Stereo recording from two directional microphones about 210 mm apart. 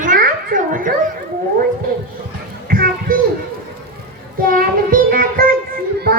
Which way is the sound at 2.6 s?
45° right (ahead or behind).